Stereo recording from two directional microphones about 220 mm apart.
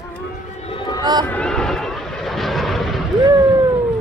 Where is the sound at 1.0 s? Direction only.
20° right (ahead or behind).